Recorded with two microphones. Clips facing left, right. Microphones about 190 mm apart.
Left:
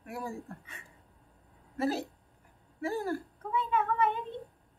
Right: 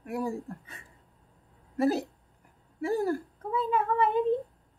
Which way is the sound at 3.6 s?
35° right (ahead or behind).